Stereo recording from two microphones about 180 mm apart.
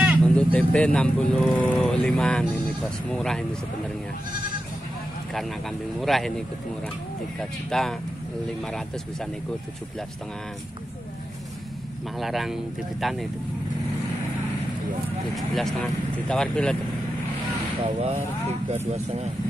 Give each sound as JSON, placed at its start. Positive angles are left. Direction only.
{"t": 0.2, "sound": "speech", "side_deg": 5}
{"t": 5.3, "sound": "speech", "side_deg": 0}
{"t": 12.2, "sound": "speech", "side_deg": 0}
{"t": 15.3, "sound": "speech", "side_deg": 0}
{"t": 17.8, "sound": "speech", "side_deg": -35}